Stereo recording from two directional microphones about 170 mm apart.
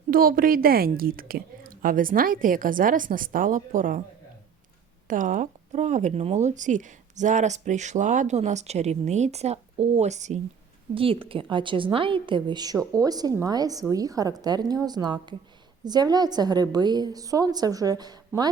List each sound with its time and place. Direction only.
0.1 s a woman's voice: 55° right (ahead or behind)
5.0 s speech: 50° right (ahead or behind)
10.9 s a woman's voice: 30° right (ahead or behind)